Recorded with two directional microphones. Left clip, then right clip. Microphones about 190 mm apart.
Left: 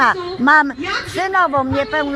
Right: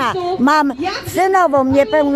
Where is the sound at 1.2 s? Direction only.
30° right (ahead or behind).